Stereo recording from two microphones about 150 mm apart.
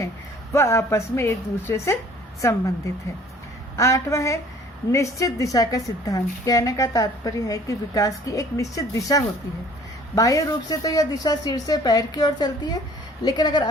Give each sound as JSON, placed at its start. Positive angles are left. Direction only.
{"t": 0.5, "sound": "a woman's voice", "side_deg": 20}